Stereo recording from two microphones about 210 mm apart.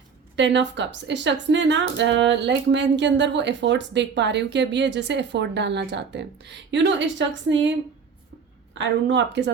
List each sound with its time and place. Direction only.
0.3 s speech: 55° right (ahead or behind)
8.8 s speech: 60° right (ahead or behind)